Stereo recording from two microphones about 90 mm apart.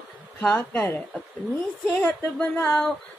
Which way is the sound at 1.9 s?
20° left (ahead or behind).